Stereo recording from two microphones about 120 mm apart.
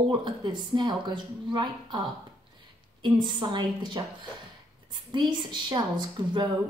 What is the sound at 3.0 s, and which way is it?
A woman's voice, 40° right (ahead or behind).